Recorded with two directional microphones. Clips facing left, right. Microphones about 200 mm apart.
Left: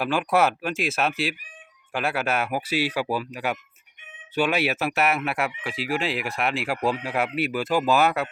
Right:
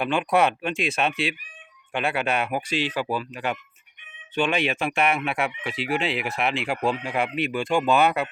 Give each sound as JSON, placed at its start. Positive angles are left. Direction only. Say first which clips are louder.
{"t": 0.0, "sound": "speech", "louder": "even", "side_deg": 0}